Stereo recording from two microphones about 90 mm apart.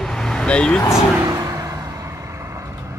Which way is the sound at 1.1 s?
40° right (ahead or behind).